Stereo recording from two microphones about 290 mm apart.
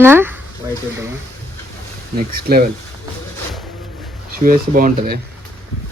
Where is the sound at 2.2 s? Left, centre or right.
Right.